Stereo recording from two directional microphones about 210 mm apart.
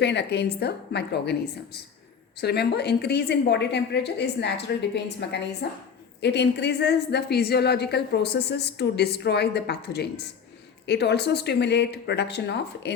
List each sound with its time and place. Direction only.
0.0 s a woman's voice: 55° left (ahead or behind)